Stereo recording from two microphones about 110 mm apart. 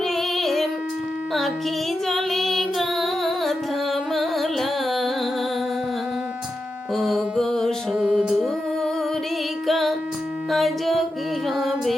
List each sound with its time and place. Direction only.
0.0 s music: centre (ahead or behind)
2.0 s music: centre (ahead or behind)
6.9 s music: centre (ahead or behind)
7.9 s music: 10° right (ahead or behind)
9.6 s music: centre (ahead or behind)